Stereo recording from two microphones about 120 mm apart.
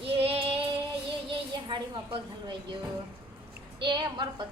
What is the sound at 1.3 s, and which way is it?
A woman's voice, 40° right (ahead or behind).